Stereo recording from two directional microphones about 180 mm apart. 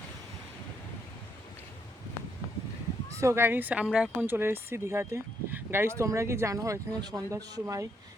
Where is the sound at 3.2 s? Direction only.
15° right (ahead or behind).